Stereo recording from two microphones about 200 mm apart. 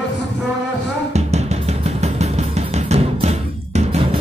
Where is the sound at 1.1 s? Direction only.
35° right (ahead or behind).